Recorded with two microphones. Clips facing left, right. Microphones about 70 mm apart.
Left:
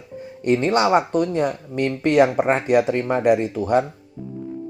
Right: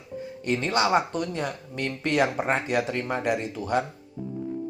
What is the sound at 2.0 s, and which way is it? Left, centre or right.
Speech, left.